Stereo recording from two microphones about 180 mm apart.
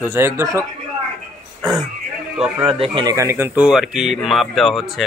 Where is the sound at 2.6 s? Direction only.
25° right (ahead or behind).